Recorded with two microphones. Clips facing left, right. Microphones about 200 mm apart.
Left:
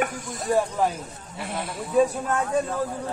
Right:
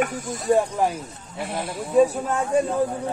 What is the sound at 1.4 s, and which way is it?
Speech, centre (ahead or behind).